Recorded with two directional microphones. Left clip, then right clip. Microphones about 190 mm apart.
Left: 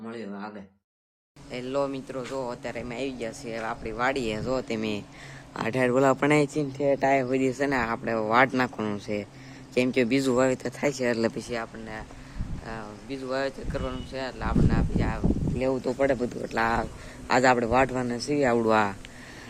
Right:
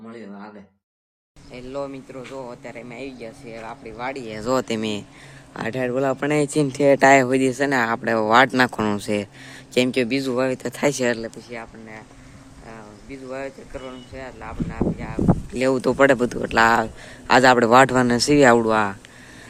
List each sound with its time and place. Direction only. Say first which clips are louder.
1.5 s speech: left 2 dB; 15° left (ahead or behind)
4.4 s speech: right 7 dB; 40° right (ahead or behind)
4.8 s a man's voice: right 4 dB; 25° right (ahead or behind)
5.5 s speech: even; 10° right (ahead or behind)
6.7 s a man's voice: right 9 dB; 40° right (ahead or behind); by 10.0 s 20° right (ahead or behind)
10.0 s speech: right 1 dB; 5° right (ahead or behind); by 11.1 s 20° right (ahead or behind)
11.2 s speech: left 5 dB; 40° left (ahead or behind)
12.6 s speech: left 2 dB; 15° left (ahead or behind)
15.5 s a man's voice: right 9 dB; 35° right (ahead or behind)
18.6 s speech: right 3 dB; 10° right (ahead or behind)